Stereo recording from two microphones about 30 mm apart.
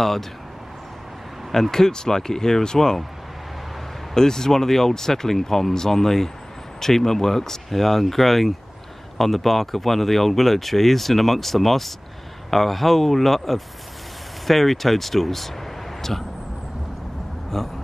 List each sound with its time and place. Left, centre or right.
1.5 s speech: centre
4.1 s speech: centre
17.5 s speech: centre